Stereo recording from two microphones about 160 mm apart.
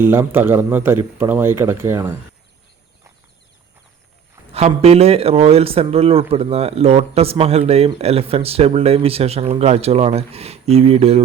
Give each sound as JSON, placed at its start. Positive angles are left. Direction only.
{"t": 0.0, "sound": "a man's voice", "side_deg": -15}
{"t": 4.5, "sound": "speech", "side_deg": -40}